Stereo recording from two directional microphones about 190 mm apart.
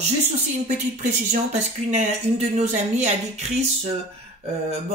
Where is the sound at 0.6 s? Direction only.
40° right (ahead or behind).